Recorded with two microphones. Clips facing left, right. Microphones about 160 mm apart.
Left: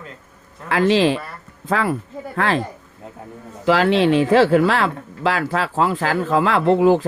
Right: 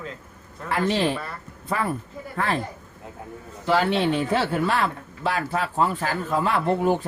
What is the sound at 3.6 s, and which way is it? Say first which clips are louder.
Speech: left 6 dB; 90° left.